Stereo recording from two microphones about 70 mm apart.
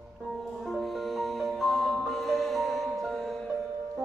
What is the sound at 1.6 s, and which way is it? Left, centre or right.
Music, centre.